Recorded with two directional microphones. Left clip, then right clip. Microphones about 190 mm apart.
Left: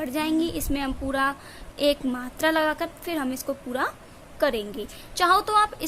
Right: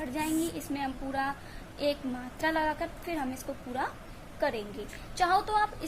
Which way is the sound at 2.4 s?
55° left (ahead or behind).